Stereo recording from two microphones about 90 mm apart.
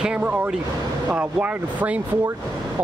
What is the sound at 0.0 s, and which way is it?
Speech, 15° right (ahead or behind).